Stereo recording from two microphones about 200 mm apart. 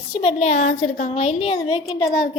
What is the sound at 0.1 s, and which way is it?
A woman's voice, 30° left (ahead or behind).